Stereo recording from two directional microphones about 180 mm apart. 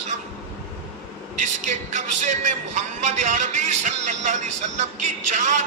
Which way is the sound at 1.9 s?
40° right (ahead or behind).